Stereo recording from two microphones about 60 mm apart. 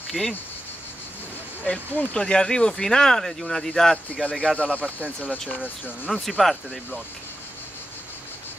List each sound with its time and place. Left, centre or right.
0.2 s speech: centre
2.1 s speech: centre
4.1 s speech: centre
5.6 s speech: centre
6.2 s speech: centre